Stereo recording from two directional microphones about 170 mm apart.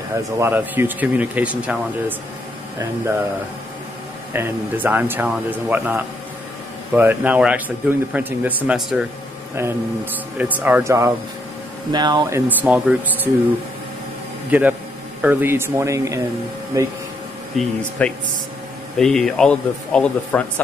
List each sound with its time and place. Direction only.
0.1 s a man's voice: 15° right (ahead or behind)
4.3 s a man's voice: 10° right (ahead or behind)
10.3 s a man's voice: 10° right (ahead or behind)
14.5 s a man's voice: 10° right (ahead or behind)
17.6 s speech: 5° left (ahead or behind)